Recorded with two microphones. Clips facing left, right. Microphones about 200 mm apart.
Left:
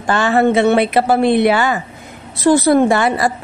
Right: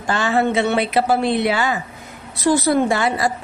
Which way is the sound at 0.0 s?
60° left (ahead or behind).